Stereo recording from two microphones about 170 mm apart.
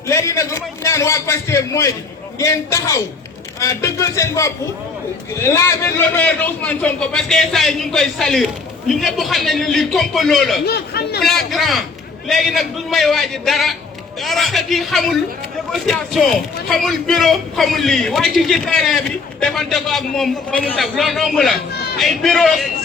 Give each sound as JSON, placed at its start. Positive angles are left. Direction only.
{"t": 0.1, "sound": "a sound", "side_deg": 15}
{"t": 2.4, "sound": "a man's voice", "side_deg": 15}
{"t": 10.7, "sound": "speech", "side_deg": 70}
{"t": 11.2, "sound": "a man's voice", "side_deg": 0}